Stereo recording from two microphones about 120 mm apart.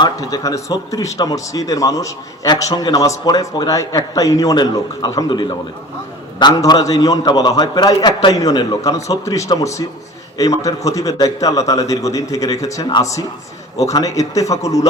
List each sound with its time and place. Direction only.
0.0 s a man's voice: 30° left (ahead or behind)